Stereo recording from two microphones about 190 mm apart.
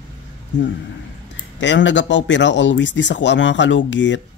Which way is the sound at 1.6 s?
75° left (ahead or behind).